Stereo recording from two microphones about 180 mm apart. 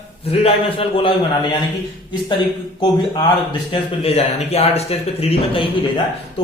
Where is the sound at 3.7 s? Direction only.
35° left (ahead or behind).